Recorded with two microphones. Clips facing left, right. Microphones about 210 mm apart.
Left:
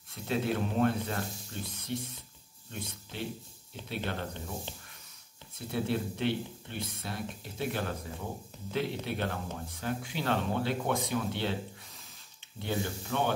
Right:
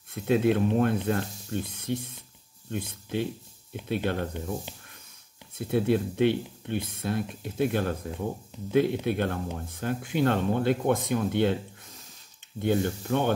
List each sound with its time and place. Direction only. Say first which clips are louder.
0.1 s speech: right 8 dB; 55° right (ahead or behind)
5.7 s speech: right 7 dB; 55° right (ahead or behind)
12.5 s speech: right 8 dB; 55° right (ahead or behind)